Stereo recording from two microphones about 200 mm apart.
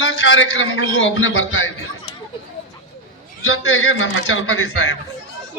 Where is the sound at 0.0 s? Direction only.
75° left (ahead or behind).